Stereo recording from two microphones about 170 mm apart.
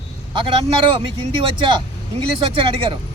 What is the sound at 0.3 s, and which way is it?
Speech, 35° right (ahead or behind).